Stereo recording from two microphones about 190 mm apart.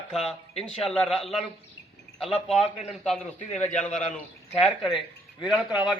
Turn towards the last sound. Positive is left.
turn(degrees=-5)  # may be behind; listen again after turning